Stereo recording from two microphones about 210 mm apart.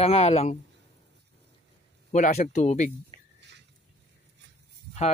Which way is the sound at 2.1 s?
35° left (ahead or behind).